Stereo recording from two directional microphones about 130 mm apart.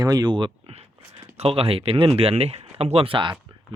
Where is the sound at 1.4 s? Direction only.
50° right (ahead or behind).